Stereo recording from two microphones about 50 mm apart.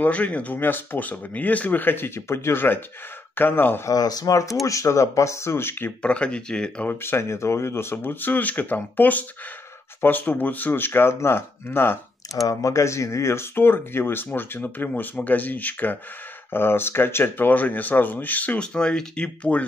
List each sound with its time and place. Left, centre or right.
0.0 s speech: left
2.1 s speech: left
3.8 s speech: left
6.0 s speech: left
6.9 s speech: left
7.2 s speech: left
12.6 s speech: left
13.6 s speech: left
16.5 s speech: left
18.6 s speech: centre